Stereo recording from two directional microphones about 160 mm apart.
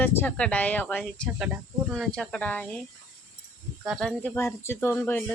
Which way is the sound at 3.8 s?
5° left (ahead or behind).